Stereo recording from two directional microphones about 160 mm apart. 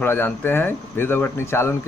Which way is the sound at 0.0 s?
15° left (ahead or behind).